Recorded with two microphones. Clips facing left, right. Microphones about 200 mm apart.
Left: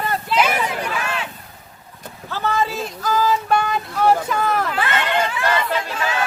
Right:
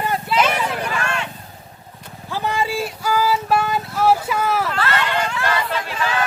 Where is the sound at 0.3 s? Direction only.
5° left (ahead or behind).